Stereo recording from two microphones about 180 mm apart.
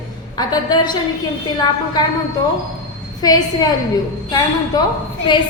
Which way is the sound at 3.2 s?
20° left (ahead or behind).